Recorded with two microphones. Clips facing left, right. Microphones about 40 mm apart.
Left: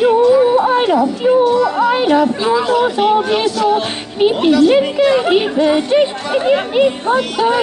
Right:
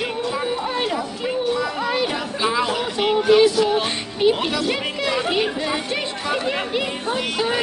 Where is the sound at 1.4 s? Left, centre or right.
Centre.